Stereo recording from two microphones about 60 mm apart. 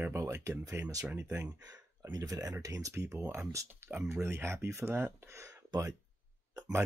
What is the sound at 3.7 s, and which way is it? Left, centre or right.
Speech, right.